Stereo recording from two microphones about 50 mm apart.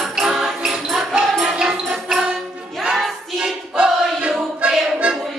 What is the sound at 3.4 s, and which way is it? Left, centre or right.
Choir, right.